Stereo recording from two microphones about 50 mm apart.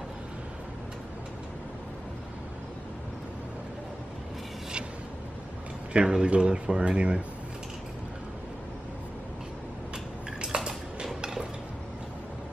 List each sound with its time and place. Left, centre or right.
5.9 s speech: centre
10.4 s cutlery: centre
11.1 s dishes: centre